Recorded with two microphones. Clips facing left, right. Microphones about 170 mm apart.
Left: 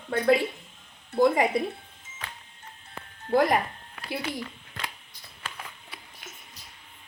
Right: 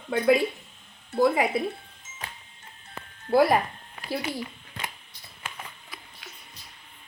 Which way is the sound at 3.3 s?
10° right (ahead or behind).